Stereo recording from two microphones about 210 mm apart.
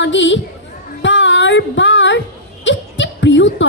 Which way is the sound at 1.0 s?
60° left (ahead or behind).